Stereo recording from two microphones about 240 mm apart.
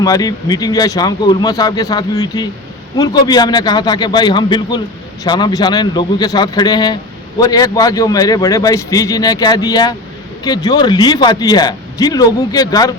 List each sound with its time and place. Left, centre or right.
0.0 s a man's voice: centre